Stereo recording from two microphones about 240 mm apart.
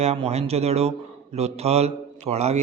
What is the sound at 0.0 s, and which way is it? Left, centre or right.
A man's voice, right.